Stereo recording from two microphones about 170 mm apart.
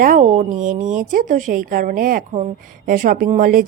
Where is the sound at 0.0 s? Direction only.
50° right (ahead or behind).